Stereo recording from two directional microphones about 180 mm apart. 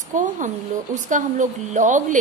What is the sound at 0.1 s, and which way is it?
A woman's voice, 45° right (ahead or behind).